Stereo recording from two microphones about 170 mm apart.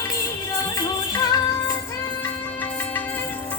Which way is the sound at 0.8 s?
20° left (ahead or behind).